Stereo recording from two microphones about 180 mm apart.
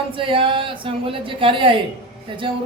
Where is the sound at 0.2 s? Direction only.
30° right (ahead or behind).